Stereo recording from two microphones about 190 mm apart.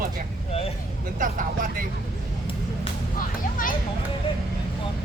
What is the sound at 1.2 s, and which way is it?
Speech, 45° right (ahead or behind).